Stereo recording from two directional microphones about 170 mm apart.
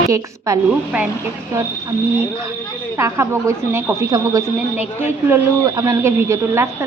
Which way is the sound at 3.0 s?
15° right (ahead or behind).